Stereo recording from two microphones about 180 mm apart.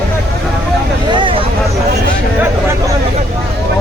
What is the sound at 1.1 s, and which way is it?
Speech, 25° right (ahead or behind).